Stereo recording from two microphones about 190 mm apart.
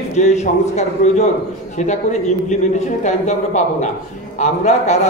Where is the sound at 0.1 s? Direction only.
35° left (ahead or behind).